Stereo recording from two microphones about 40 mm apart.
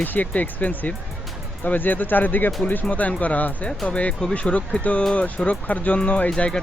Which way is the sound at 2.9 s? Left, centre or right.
Left.